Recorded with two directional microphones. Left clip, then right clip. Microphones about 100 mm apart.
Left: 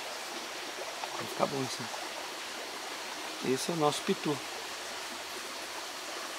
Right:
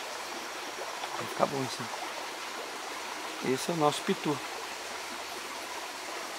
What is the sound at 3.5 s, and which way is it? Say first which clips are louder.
Speech: right 2 dB; 20° right (ahead or behind).